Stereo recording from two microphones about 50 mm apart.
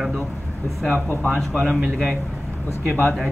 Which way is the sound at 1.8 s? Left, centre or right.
Centre.